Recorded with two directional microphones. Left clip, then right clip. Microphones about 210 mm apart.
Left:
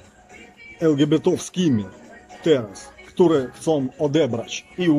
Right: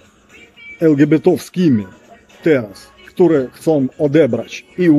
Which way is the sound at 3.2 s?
20° right (ahead or behind).